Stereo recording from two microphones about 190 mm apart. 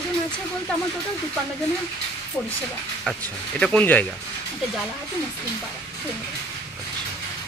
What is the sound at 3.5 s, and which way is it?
Speech, 5° left (ahead or behind).